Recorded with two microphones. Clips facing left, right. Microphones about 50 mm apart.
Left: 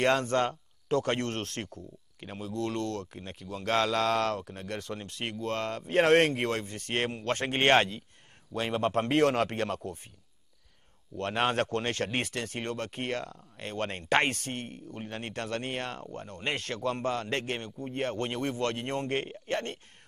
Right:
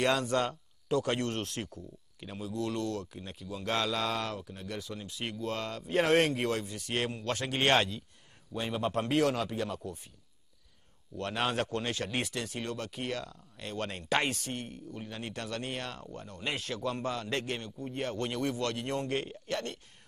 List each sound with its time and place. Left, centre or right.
0.0 s speech: left
5.2 s speech: left
11.1 s speech: left